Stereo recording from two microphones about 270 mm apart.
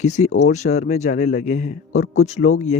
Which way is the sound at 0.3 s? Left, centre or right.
Left.